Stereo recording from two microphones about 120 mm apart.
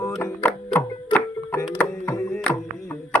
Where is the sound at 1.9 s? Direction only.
25° left (ahead or behind).